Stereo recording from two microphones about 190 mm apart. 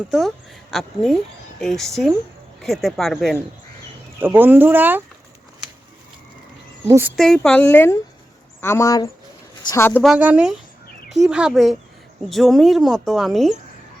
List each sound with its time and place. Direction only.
0.1 s speech: centre (ahead or behind)
4.2 s speech: 10° right (ahead or behind)
6.8 s speech: 15° right (ahead or behind)
7.2 s speech: 5° left (ahead or behind)
10.0 s speech: 5° right (ahead or behind)